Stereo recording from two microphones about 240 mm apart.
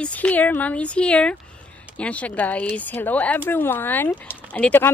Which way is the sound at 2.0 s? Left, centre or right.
Centre.